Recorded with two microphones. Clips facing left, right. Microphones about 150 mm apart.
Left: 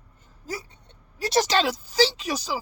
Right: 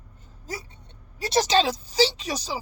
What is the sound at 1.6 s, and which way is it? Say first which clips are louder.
Speech: even; 20° right (ahead or behind).